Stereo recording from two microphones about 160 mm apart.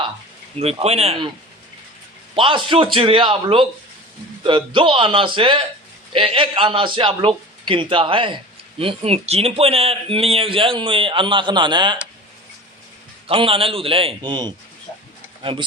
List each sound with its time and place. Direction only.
0.6 s speech: 40° right (ahead or behind)
2.3 s a man's voice: 35° right (ahead or behind)
13.2 s speech: 35° right (ahead or behind)